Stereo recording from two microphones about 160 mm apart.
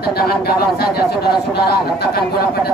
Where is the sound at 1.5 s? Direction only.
85° left.